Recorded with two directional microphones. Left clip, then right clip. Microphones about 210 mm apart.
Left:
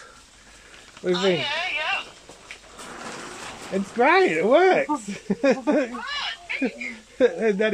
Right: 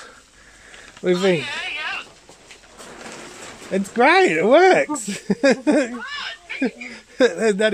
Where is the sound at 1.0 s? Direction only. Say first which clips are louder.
Right 4 dB; 55° right (ahead or behind).